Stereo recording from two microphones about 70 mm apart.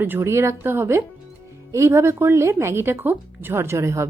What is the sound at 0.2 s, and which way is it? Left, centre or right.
A woman's voice, right.